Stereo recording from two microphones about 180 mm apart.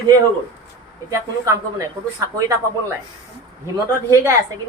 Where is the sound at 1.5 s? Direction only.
20° right (ahead or behind).